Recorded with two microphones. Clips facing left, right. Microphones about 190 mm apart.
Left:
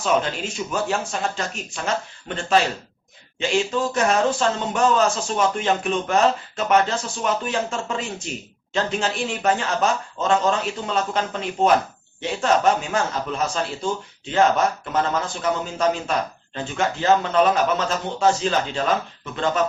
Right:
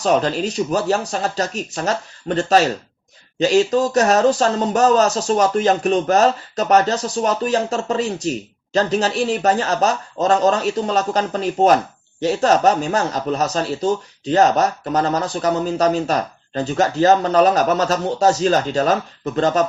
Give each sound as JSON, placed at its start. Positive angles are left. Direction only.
{"t": 0.0, "sound": "speech", "side_deg": -40}